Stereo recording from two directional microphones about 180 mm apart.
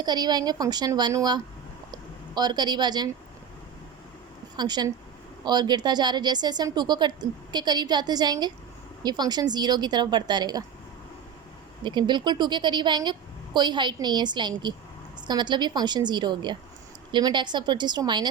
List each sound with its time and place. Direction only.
0.0 s speech: 25° right (ahead or behind)
4.5 s speech: 25° right (ahead or behind)
11.8 s speech: 25° right (ahead or behind)